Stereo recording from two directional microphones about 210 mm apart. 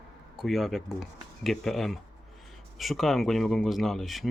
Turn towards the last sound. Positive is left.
turn(degrees=0)  # may be behind; listen again after turning